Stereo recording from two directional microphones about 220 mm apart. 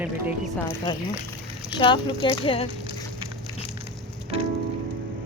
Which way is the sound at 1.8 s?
20° left (ahead or behind).